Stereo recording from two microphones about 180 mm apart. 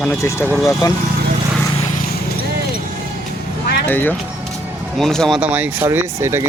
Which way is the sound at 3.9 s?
10° left (ahead or behind).